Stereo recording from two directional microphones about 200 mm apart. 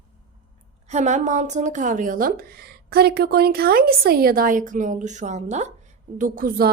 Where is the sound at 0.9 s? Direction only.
35° right (ahead or behind).